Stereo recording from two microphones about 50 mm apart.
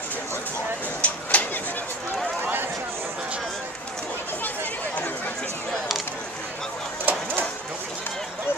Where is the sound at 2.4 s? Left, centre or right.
Right.